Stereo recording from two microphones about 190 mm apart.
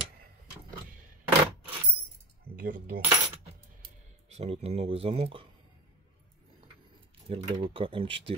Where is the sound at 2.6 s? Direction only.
50° right (ahead or behind).